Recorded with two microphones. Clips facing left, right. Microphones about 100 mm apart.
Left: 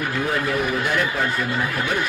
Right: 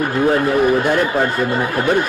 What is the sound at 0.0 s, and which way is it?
A man's voice, 40° right (ahead or behind).